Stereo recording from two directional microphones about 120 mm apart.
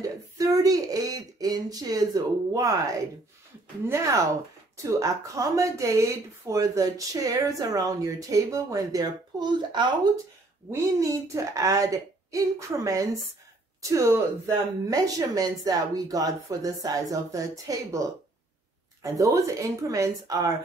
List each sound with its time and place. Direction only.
0.0 s a sound: 30° right (ahead or behind)
4.8 s speech: 25° right (ahead or behind)
10.7 s speech: 25° right (ahead or behind)
19.0 s speech: 30° right (ahead or behind)